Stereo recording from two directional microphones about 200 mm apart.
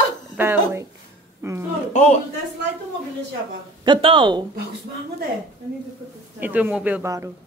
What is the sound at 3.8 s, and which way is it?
Speech, 25° right (ahead or behind).